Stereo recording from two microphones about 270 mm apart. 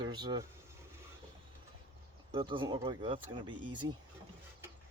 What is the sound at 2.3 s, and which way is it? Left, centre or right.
Speech, centre.